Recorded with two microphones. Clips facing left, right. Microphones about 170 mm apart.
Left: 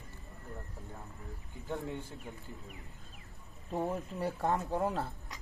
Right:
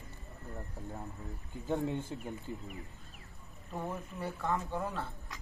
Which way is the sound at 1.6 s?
20° right (ahead or behind).